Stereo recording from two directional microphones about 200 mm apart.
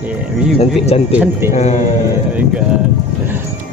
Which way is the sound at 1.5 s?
35° left (ahead or behind).